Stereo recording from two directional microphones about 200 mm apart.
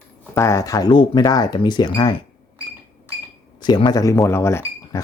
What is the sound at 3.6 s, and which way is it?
Speech, 20° left (ahead or behind).